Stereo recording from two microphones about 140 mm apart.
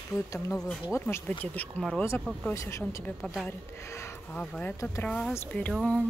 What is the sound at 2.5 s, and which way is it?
Speech, 20° left (ahead or behind).